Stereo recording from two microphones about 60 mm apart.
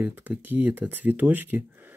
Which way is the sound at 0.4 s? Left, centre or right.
Right.